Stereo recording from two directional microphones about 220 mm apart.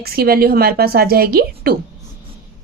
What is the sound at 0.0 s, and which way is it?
A woman's voice, 45° right (ahead or behind).